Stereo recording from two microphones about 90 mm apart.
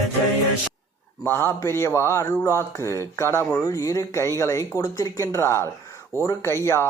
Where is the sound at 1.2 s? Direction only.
25° left (ahead or behind).